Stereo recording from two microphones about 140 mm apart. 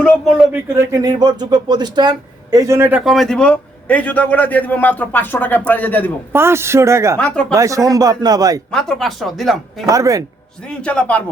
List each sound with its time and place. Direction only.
0.5 s speech: 20° right (ahead or behind)
3.0 s a man's voice: centre (ahead or behind)
6.3 s speech: 15° right (ahead or behind)
7.2 s a man's voice: 10° left (ahead or behind)
7.5 s speech: 20° right (ahead or behind)
8.7 s speech: 5° left (ahead or behind)
9.8 s speech: 25° right (ahead or behind)
10.7 s a man's voice: 10° left (ahead or behind)